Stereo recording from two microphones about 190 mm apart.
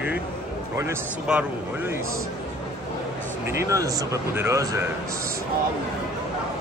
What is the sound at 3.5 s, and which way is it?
Speech, 15° right (ahead or behind).